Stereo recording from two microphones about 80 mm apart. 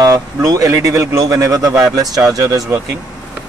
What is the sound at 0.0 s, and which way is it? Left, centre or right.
Speech, right.